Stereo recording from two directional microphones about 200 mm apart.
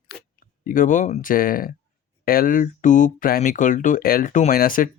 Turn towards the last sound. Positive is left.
turn(degrees=45)  # may be behind; listen again after turning